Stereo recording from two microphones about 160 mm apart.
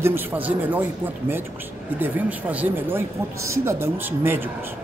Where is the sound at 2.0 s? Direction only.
10° right (ahead or behind).